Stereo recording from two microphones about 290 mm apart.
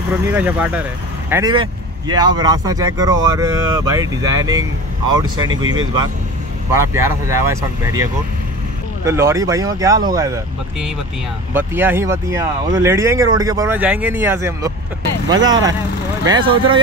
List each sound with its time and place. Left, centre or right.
0.4 s speech: centre